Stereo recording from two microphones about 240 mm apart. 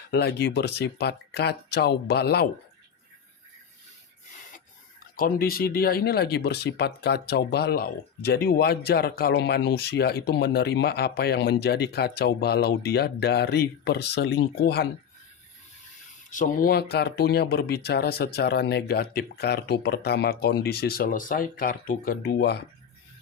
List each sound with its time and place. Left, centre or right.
0.1 s speech: left
5.1 s speech: left
16.3 s speech: left